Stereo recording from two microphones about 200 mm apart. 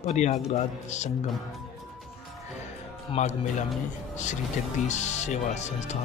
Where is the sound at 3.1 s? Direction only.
35° left (ahead or behind).